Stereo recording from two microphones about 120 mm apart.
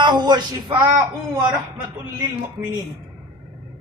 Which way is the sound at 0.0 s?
35° right (ahead or behind).